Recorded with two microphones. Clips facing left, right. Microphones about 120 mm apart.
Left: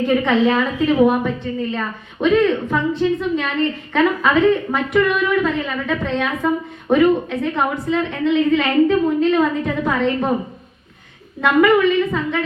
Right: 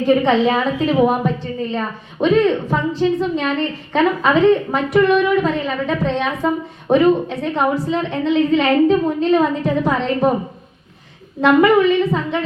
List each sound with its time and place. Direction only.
0.0 s a woman's voice: 30° right (ahead or behind)
11.3 s a woman's voice: 30° right (ahead or behind)